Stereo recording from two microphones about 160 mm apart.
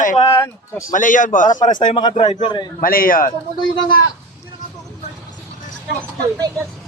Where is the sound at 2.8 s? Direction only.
60° left (ahead or behind).